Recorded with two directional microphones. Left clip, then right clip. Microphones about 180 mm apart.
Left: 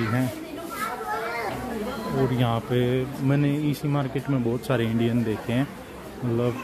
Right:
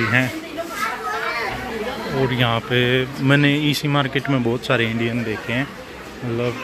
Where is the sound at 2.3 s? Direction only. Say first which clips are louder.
Right 6 dB; 10° left (ahead or behind).